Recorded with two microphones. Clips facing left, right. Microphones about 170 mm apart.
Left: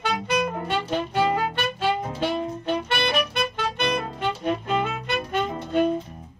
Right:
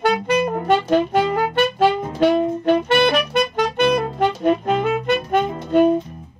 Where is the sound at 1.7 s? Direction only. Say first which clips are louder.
Right 7 dB; 60° right (ahead or behind).